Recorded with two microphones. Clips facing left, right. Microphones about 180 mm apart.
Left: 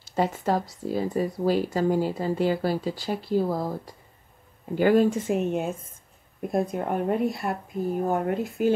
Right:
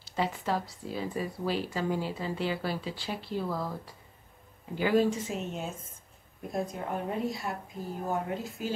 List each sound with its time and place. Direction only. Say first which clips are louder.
0.0 s speech: left 6 dB; 45° left (ahead or behind)
4.7 s speech: left 6 dB; 50° left (ahead or behind)